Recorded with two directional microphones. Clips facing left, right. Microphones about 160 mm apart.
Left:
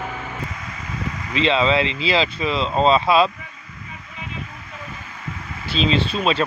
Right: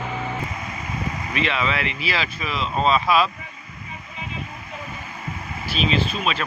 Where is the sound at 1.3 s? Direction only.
25° left (ahead or behind).